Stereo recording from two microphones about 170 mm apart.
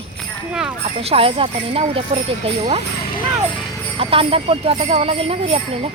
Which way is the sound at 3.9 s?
35° right (ahead or behind).